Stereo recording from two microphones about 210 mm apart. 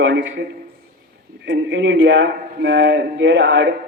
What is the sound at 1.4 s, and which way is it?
A man's voice, 55° right (ahead or behind).